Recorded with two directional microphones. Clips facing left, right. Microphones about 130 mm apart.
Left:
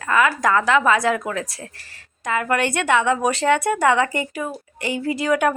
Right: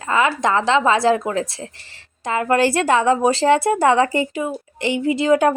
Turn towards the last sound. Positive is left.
turn(degrees=-30)  # may be behind; listen again after turning